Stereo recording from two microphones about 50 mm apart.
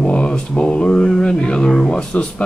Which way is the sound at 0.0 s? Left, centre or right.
Left.